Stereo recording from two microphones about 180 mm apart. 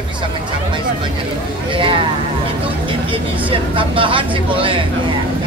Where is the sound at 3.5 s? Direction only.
30° right (ahead or behind).